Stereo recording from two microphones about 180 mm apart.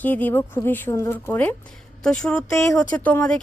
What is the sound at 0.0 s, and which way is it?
Speech, 10° left (ahead or behind).